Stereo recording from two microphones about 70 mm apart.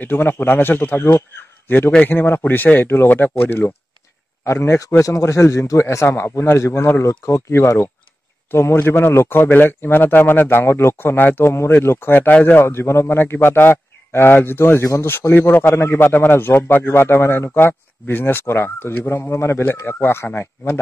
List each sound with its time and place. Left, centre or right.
0.0 s a man's voice: left
11.5 s a man's voice: left
12.3 s speech: centre
12.5 s a man's voice: left